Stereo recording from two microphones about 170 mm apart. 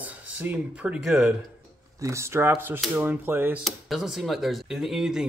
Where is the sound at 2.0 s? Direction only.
15° right (ahead or behind).